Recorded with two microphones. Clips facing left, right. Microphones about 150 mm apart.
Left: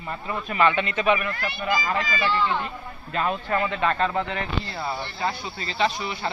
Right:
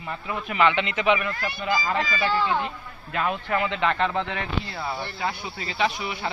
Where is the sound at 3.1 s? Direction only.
5° right (ahead or behind).